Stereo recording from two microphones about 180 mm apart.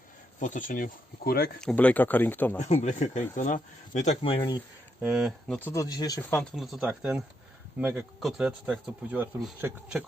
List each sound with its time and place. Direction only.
0.3 s speech: 45° left (ahead or behind)
1.6 s speech: 10° left (ahead or behind)
2.6 s speech: 40° left (ahead or behind)
4.9 s speech: 5° right (ahead or behind)
5.5 s speech: 15° left (ahead or behind)
6.4 s speech: centre (ahead or behind)